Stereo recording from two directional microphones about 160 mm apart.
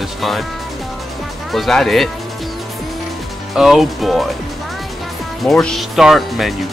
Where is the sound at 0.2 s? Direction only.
Centre (ahead or behind).